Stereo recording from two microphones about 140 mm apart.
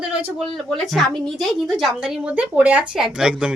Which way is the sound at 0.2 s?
10° right (ahead or behind).